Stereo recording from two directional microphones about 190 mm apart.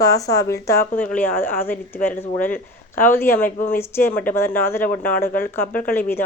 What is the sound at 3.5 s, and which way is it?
Speech, 45° left (ahead or behind).